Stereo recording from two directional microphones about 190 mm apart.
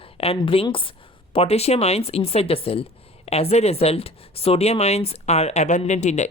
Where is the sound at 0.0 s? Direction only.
30° left (ahead or behind).